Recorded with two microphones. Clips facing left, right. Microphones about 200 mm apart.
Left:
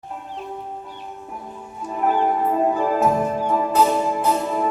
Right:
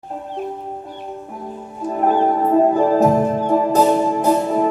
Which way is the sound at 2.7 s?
35° right (ahead or behind).